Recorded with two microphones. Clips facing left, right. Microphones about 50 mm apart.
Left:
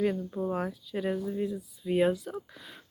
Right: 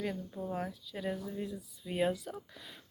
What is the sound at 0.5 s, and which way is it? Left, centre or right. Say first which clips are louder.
Speech: left 6 dB; centre.